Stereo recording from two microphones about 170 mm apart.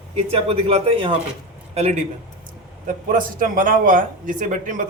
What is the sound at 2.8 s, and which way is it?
Speech, 55° right (ahead or behind).